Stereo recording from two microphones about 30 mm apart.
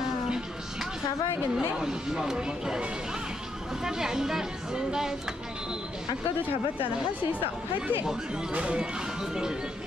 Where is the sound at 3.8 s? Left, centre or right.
Centre.